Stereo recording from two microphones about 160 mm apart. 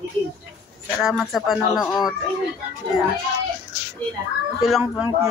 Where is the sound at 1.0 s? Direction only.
Centre (ahead or behind).